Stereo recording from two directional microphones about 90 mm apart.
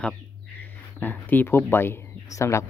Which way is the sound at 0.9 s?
20° left (ahead or behind).